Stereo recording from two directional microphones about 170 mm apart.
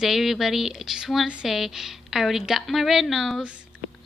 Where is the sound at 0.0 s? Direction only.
Centre (ahead or behind).